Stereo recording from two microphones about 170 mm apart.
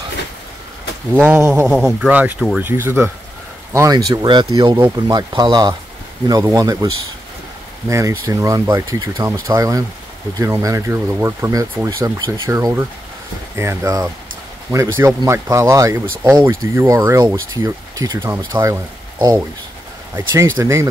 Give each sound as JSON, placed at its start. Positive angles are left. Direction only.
{"t": 1.1, "sound": "speech", "side_deg": -10}
{"t": 7.9, "sound": "speech", "side_deg": -20}